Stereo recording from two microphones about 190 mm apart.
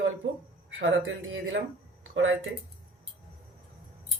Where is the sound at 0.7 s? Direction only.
85° right.